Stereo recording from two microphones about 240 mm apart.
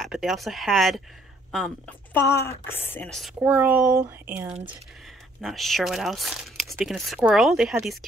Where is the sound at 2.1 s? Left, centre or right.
Centre.